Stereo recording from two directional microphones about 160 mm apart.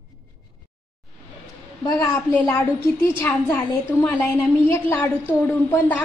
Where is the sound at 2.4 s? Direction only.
20° left (ahead or behind).